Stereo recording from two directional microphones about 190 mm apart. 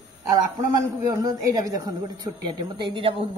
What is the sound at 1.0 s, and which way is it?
A woman's voice, 20° right (ahead or behind).